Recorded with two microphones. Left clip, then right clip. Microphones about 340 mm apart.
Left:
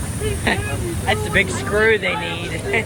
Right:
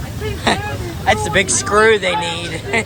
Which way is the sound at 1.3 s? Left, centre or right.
Centre.